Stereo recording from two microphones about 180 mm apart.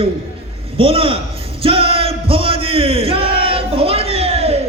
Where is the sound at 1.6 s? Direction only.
30° right (ahead or behind).